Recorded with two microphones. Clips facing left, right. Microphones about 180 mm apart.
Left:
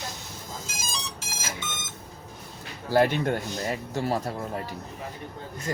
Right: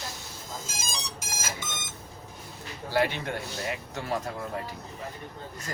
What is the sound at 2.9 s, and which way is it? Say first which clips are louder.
Speech: left 5 dB; 45° left (ahead or behind).